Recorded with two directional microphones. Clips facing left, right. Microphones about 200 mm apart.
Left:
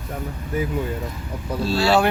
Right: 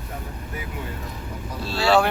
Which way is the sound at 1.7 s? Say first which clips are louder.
Left 1 dB; centre (ahead or behind).